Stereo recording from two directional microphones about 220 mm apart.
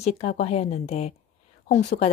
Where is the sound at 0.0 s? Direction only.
30° left (ahead or behind).